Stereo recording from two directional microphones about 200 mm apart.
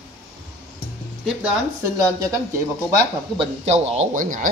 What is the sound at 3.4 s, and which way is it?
Speech, 35° right (ahead or behind).